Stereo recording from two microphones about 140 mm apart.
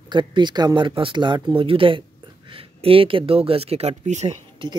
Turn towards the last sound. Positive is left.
turn(degrees=-35)  # may be behind; listen again after turning